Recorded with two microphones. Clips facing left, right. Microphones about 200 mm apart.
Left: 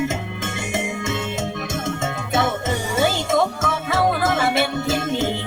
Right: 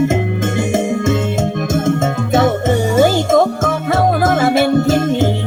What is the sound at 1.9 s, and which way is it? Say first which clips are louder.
Music: right 10 dB; 45° right (ahead or behind).